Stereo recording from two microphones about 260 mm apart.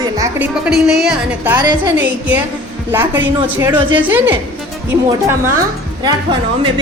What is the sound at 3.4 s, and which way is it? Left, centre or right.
Speech, centre.